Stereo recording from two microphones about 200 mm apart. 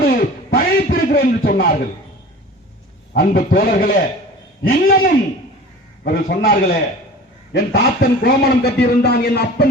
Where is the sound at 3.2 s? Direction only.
45° left (ahead or behind).